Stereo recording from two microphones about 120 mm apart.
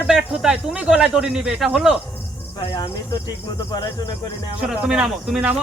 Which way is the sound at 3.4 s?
30° left (ahead or behind).